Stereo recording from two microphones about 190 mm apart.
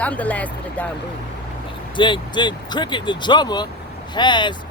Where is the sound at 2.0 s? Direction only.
25° left (ahead or behind).